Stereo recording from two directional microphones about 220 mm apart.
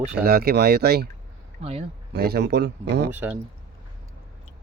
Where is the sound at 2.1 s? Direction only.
45° right (ahead or behind).